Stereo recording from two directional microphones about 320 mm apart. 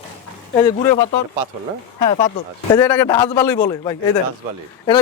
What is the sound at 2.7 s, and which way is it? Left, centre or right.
Speech, centre.